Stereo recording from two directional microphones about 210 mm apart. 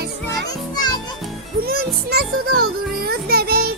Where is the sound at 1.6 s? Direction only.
45° right (ahead or behind).